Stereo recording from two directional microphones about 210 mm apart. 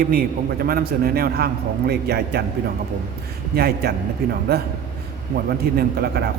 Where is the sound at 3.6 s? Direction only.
50° right (ahead or behind).